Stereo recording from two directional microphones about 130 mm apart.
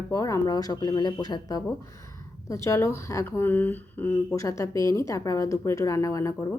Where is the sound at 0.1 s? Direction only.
25° left (ahead or behind).